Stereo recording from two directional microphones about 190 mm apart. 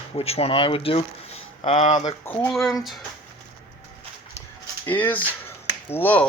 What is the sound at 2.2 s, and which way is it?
Speech, 10° left (ahead or behind).